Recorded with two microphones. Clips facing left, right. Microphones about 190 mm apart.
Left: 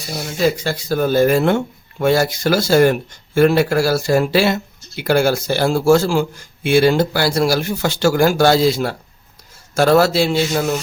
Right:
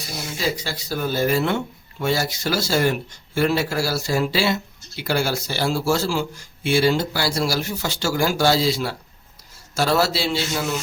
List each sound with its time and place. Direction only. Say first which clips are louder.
0.3 s speech: left 8 dB; 55° left (ahead or behind)